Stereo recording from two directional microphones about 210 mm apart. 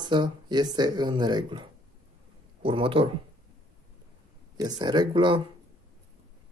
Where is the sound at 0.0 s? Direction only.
20° right (ahead or behind).